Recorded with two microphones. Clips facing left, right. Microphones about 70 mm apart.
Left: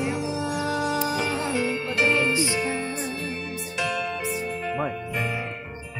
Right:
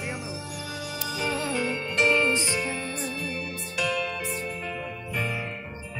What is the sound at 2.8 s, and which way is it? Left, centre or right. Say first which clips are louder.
Music: left 2 dB; centre.